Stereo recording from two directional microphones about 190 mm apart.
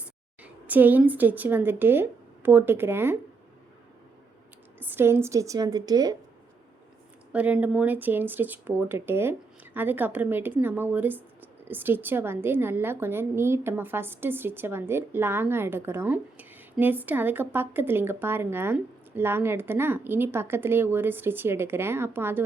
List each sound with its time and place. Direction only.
0.0 s a woman's voice: 10° right (ahead or behind)
4.8 s a woman's voice: 10° right (ahead or behind)
7.3 s a woman's voice: 10° right (ahead or behind)